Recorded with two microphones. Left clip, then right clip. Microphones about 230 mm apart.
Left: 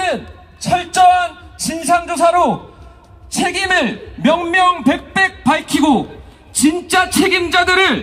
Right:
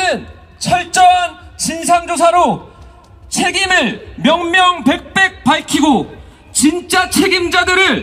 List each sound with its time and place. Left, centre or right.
0.0 s a man's voice: right